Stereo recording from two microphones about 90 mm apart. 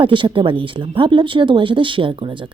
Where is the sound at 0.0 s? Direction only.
65° right (ahead or behind).